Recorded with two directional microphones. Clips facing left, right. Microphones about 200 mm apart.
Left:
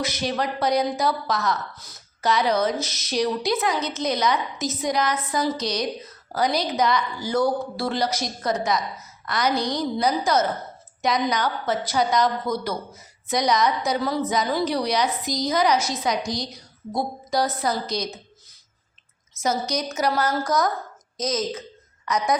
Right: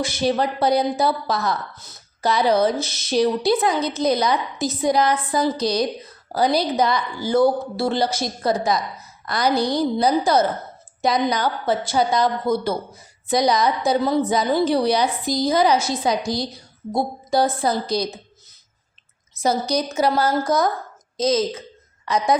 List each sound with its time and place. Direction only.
0.0 s a woman's voice: 30° right (ahead or behind)
19.4 s a woman's voice: 30° right (ahead or behind)